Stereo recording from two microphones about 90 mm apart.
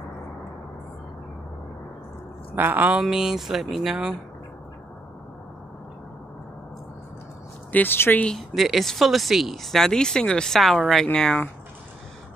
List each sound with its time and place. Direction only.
2.5 s speech: 20° right (ahead or behind)
3.0 s speech: 5° right (ahead or behind)
7.7 s speech: 25° left (ahead or behind)
8.3 s speech: centre (ahead or behind)